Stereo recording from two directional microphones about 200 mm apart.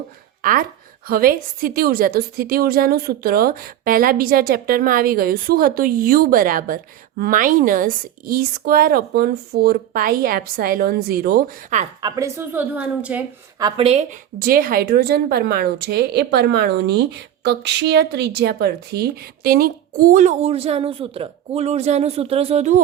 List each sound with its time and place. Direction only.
1.0 s a woman's voice: 50° right (ahead or behind)
12.0 s a woman's voice: 15° right (ahead or behind)
13.6 s a woman's voice: 25° right (ahead or behind)
14.4 s a woman's voice: 45° right (ahead or behind)